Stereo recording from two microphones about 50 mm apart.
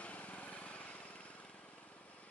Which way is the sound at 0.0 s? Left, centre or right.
Left.